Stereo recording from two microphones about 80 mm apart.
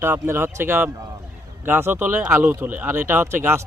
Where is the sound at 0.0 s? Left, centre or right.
Right.